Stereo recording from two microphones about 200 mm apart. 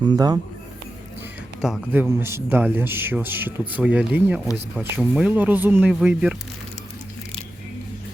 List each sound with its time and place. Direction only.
0.0 s speech: 20° right (ahead or behind)
1.9 s speech: 10° right (ahead or behind)